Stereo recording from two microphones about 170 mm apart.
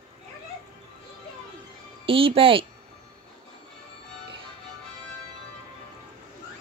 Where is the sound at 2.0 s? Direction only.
30° right (ahead or behind).